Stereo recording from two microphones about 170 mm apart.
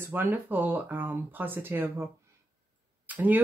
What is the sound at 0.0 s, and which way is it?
Speech, 10° right (ahead or behind).